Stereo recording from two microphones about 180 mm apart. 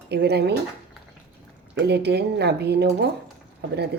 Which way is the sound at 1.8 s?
65° right (ahead or behind).